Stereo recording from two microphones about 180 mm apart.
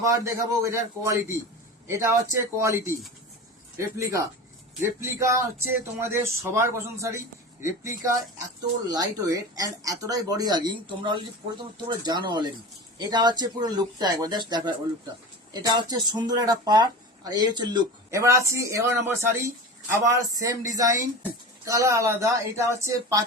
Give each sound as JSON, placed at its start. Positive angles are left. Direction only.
{"t": 0.0, "sound": "speech", "side_deg": -15}